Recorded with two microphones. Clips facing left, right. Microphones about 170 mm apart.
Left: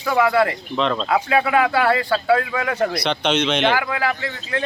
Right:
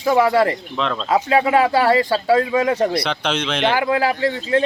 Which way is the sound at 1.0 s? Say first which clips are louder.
Right 7 dB; 30° right (ahead or behind).